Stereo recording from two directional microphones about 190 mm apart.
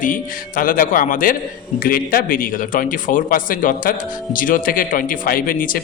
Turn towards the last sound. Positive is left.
turn(degrees=45)  # may be behind; listen again after turning